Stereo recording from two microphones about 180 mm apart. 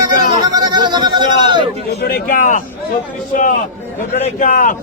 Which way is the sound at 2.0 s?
55° left (ahead or behind).